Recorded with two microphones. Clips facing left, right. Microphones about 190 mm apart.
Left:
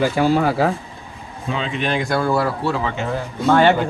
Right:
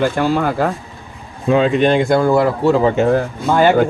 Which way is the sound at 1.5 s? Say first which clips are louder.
Right 11 dB; 50° right (ahead or behind).